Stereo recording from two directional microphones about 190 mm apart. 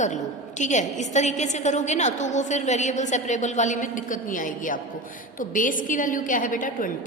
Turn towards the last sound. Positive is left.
turn(degrees=45)  # may be behind; listen again after turning